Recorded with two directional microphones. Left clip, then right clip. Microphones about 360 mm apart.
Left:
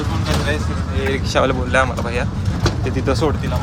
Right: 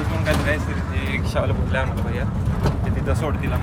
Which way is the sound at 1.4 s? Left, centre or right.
Left.